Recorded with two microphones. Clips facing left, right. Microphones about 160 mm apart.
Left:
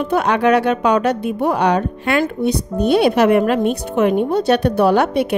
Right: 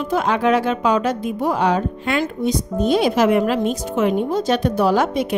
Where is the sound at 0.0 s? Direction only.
65° left (ahead or behind).